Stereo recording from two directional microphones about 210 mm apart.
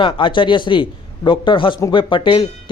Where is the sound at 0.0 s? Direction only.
25° left (ahead or behind).